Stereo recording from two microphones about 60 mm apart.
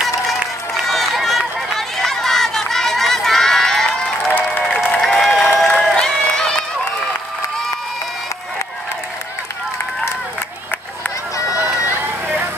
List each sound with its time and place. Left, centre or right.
0.8 s run: centre
4.4 s applause: centre
4.7 s a sound: centre
5.0 s crowd: centre